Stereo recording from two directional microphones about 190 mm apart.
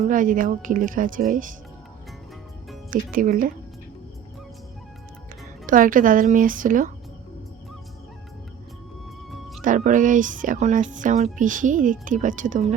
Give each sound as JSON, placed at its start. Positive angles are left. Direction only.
{"t": 0.0, "sound": "speech", "side_deg": -45}
{"t": 2.9, "sound": "speech", "side_deg": -45}
{"t": 5.6, "sound": "speech", "side_deg": -45}
{"t": 9.6, "sound": "speech", "side_deg": -40}